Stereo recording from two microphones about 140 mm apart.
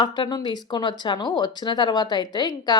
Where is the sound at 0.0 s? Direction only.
30° left (ahead or behind).